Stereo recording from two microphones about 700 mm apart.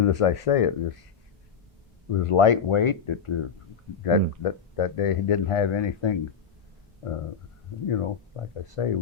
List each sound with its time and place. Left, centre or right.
0.0 s speech: left
2.2 s speech: left
7.9 s speech: left